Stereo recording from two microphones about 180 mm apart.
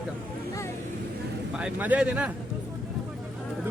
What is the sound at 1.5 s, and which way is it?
Speech, 5° right (ahead or behind).